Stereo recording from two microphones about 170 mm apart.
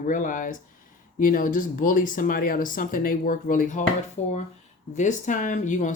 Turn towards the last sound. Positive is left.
turn(degrees=45)  # may be behind; listen again after turning